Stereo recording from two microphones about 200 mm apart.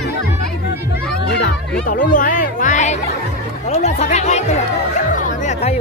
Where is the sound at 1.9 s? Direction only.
45° left (ahead or behind).